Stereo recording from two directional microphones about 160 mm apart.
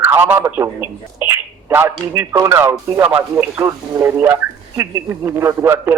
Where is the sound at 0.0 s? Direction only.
10° right (ahead or behind).